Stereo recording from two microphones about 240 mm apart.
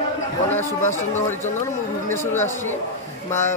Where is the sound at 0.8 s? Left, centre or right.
Left.